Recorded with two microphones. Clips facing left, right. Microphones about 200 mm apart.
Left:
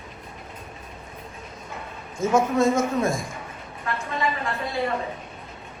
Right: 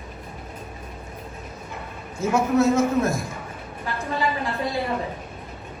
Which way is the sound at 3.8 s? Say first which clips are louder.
Right 1 dB; 35° right (ahead or behind).